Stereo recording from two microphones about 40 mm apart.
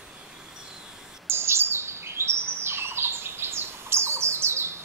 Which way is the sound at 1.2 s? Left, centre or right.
Right.